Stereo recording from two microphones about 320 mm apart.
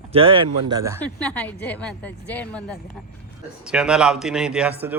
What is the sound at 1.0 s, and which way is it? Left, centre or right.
A man's voice, centre.